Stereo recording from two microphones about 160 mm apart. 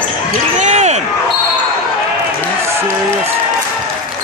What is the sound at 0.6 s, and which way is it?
Basketball bounce, 45° right (ahead or behind).